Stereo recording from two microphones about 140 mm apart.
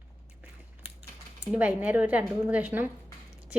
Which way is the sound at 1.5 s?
10° right (ahead or behind).